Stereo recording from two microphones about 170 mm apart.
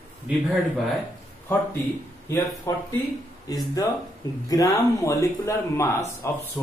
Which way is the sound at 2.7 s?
20° left (ahead or behind).